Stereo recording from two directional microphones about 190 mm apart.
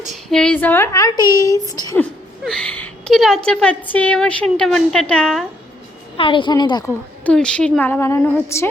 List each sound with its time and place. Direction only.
0.3 s speech: 5° left (ahead or behind)
2.4 s a woman's voice: 5° left (ahead or behind)
6.1 s a woman's voice: 25° left (ahead or behind)
7.3 s speech: 5° left (ahead or behind)